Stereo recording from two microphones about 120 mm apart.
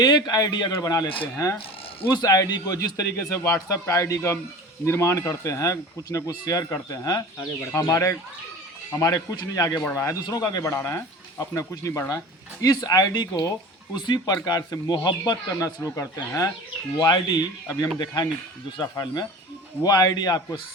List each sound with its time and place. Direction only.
0.0 s a man's voice: 35° left (ahead or behind)
1.0 s speech: 50° left (ahead or behind)
1.4 s a man's voice: 25° left (ahead or behind)